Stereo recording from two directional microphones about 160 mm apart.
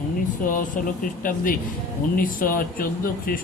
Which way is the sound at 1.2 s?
60° left (ahead or behind).